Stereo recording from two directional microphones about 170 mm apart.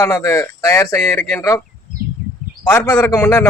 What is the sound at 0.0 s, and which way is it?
Speech, 15° left (ahead or behind).